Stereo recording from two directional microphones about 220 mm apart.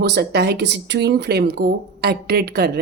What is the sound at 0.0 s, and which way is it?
Speech, 50° right (ahead or behind).